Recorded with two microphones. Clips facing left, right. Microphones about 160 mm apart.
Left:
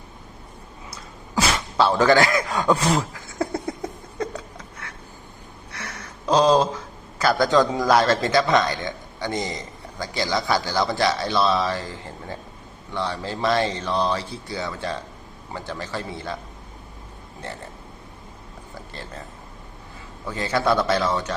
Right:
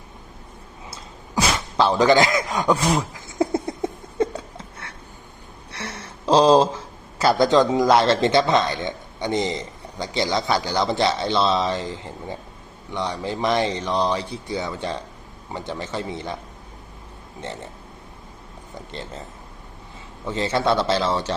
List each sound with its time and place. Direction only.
1.7 s a sound: 15° right (ahead or behind)
5.7 s a man's voice: 25° right (ahead or behind)
20.2 s a man's voice: 25° right (ahead or behind)